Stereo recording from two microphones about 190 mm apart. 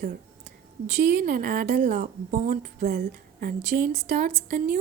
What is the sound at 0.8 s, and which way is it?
Speech, 40° right (ahead or behind).